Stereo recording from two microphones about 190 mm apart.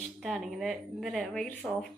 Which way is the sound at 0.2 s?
Centre (ahead or behind).